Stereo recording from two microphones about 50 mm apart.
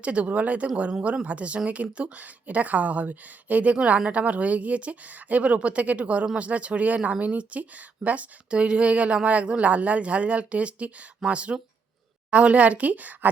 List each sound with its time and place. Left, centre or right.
0.0 s speech: right